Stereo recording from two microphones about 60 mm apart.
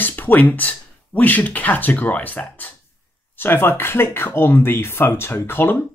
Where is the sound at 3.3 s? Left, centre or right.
Left.